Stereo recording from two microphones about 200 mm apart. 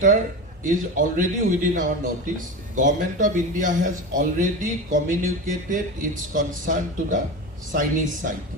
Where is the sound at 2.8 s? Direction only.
40° right (ahead or behind).